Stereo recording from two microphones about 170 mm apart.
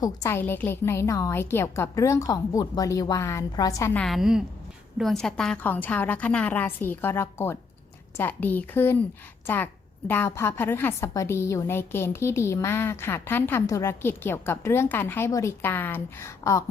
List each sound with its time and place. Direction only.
0.0 s a woman's voice: 15° left (ahead or behind)
3.9 s a woman's voice: centre (ahead or behind)
10.1 s a woman's voice: 15° left (ahead or behind)